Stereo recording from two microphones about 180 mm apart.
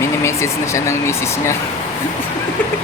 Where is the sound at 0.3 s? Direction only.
15° left (ahead or behind).